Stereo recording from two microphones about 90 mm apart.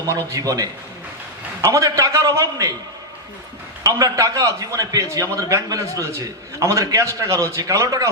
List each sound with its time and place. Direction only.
0.3 s a man's voice: 40° right (ahead or behind)
3.8 s a man's voice: 40° right (ahead or behind)